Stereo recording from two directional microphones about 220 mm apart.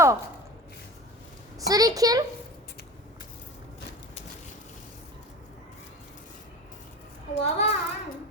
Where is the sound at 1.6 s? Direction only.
15° right (ahead or behind).